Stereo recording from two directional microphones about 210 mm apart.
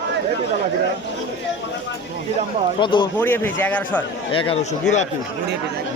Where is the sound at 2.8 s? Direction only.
20° left (ahead or behind).